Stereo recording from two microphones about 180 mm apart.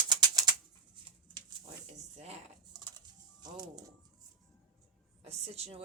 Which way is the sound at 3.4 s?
20° right (ahead or behind).